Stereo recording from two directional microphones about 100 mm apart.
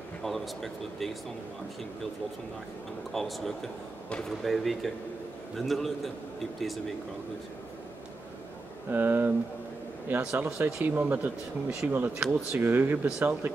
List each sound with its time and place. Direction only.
0.2 s speech: centre (ahead or behind)
3.1 s speech: centre (ahead or behind)
8.9 s speech: 20° right (ahead or behind)